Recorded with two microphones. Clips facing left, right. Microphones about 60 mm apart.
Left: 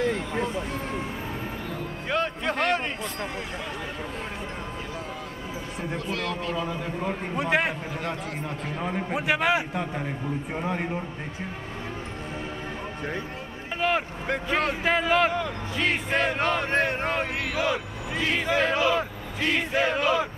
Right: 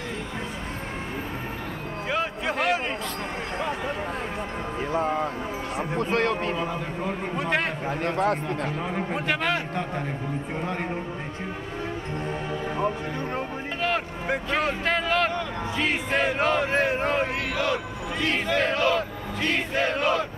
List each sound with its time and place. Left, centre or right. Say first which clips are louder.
2.0 s music: left 1 dB; centre
4.9 s a sound: right 11 dB; right
5.8 s a man's voice: right 6 dB; right
7.1 s speech: left 1 dB; centre
8.0 s speech: right 12 dB; right
8.6 s speech: right 1 dB; centre
13.7 s vehicle: left 2 dB; centre
14.5 s speech: left 2 dB; centre